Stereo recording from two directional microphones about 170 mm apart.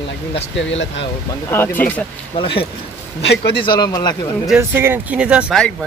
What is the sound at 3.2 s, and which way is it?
Speech, 90° left.